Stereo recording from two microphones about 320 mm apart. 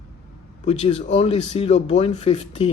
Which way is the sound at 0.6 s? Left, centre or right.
Centre.